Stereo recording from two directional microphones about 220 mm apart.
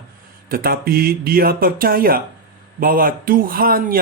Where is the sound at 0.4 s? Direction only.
40° right (ahead or behind).